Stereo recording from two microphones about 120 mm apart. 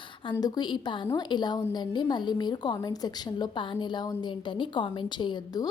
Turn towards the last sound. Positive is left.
turn(degrees=35)  # may be behind; listen again after turning